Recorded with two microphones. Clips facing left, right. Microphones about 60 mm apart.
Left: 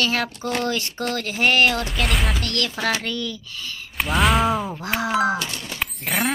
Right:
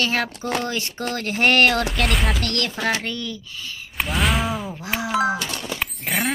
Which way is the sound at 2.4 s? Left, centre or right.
Right.